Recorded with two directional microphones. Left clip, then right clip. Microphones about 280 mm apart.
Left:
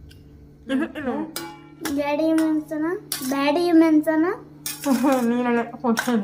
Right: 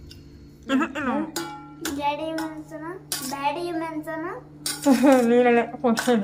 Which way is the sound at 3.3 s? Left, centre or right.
Left.